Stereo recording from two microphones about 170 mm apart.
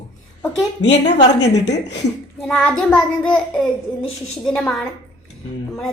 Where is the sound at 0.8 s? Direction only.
90° left.